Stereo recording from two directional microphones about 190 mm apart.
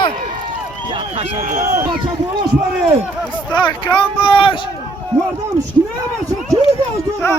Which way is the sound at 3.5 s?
25° left (ahead or behind).